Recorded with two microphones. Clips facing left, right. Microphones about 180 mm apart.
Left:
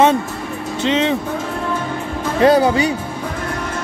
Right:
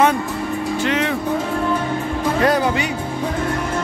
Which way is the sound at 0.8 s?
20° left (ahead or behind).